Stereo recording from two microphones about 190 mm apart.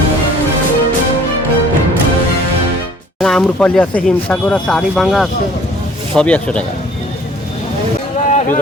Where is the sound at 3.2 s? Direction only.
5° left (ahead or behind).